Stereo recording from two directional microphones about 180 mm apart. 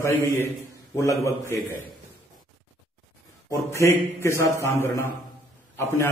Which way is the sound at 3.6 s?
15° left (ahead or behind).